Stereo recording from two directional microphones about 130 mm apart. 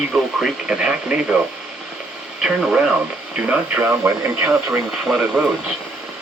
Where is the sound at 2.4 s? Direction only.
5° right (ahead or behind).